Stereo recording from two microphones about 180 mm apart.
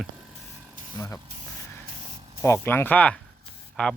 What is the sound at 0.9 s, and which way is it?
Speech, 20° left (ahead or behind).